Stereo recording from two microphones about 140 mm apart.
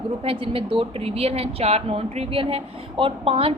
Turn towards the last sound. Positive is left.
turn(degrees=-40)  # may be behind; listen again after turning